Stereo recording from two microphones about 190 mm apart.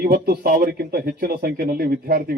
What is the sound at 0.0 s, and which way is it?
Speech, 55° right (ahead or behind).